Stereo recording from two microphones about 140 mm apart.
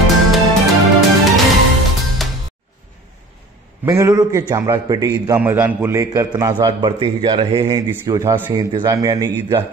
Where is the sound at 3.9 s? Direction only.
20° right (ahead or behind).